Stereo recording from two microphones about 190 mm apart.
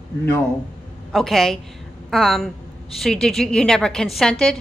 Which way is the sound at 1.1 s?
Centre (ahead or behind).